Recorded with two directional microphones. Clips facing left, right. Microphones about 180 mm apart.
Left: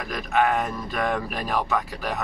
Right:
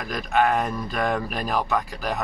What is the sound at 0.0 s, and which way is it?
Speech, centre (ahead or behind).